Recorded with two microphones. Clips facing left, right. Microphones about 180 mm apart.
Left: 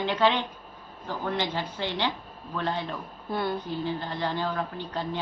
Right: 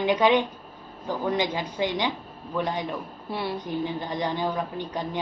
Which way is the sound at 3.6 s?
15° right (ahead or behind).